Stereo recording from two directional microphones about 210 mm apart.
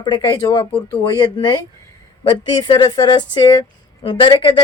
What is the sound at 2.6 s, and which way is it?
Speech, 20° left (ahead or behind).